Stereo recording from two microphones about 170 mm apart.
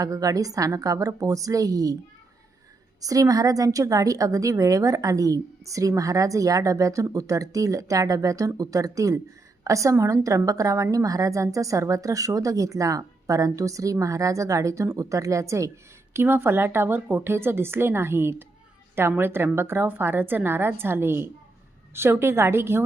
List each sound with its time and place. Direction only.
0.0 s a woman's voice: 20° right (ahead or behind)
3.0 s a woman's voice: 20° right (ahead or behind)